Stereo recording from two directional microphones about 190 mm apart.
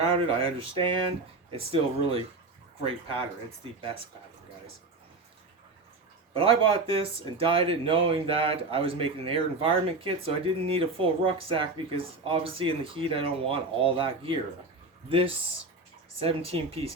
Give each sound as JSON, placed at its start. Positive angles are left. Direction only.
{"t": 0.0, "sound": "speech", "side_deg": -30}
{"t": 6.3, "sound": "speech", "side_deg": -30}